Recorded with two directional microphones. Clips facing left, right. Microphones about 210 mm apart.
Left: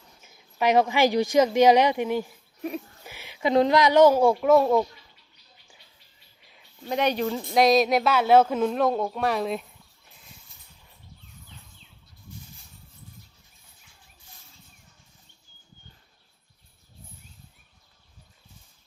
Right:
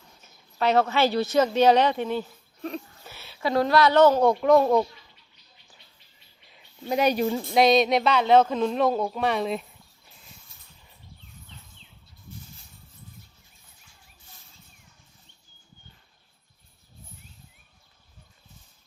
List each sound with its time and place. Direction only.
0.2 s a woman's voice: 10° left (ahead or behind)
6.8 s speech: 10° right (ahead or behind)
7.5 s speech: centre (ahead or behind)